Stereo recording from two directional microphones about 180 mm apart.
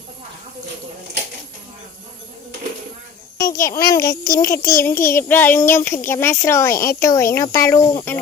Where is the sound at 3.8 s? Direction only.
20° left (ahead or behind).